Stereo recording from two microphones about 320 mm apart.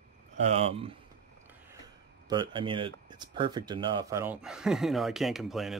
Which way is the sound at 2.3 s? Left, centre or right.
Centre.